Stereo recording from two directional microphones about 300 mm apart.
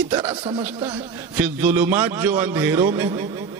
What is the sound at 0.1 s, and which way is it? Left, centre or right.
A man's voice, centre.